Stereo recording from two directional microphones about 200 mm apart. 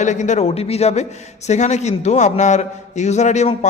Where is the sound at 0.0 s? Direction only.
35° left (ahead or behind).